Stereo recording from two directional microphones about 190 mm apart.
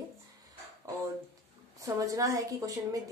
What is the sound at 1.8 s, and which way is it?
Speech, 15° right (ahead or behind).